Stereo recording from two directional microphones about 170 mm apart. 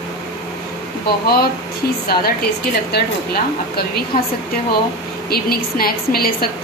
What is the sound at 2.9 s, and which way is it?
Speech, 70° left (ahead or behind).